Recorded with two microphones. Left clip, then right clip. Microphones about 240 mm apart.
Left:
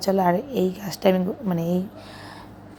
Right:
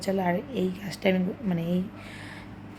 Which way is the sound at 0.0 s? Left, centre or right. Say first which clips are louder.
Left 7 dB; centre.